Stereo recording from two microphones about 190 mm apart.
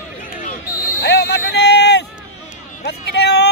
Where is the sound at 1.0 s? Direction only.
60° left (ahead or behind).